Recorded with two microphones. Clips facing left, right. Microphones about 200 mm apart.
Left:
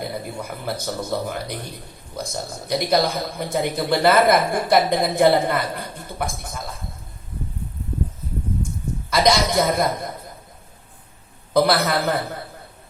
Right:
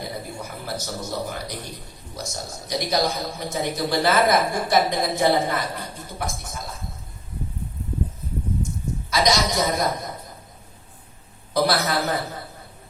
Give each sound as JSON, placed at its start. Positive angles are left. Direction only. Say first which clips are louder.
{"t": 0.4, "sound": "a woman's voice", "louder": "left 4 dB", "side_deg": 55}
{"t": 9.0, "sound": "a woman's voice", "louder": "left 3 dB", "side_deg": 55}
{"t": 11.5, "sound": "a woman's voice", "louder": "left 3 dB", "side_deg": 55}